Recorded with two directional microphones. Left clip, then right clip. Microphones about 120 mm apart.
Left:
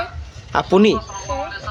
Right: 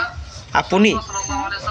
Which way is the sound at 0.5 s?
50° left (ahead or behind).